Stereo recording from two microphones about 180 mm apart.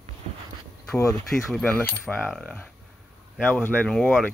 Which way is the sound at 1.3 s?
Centre (ahead or behind).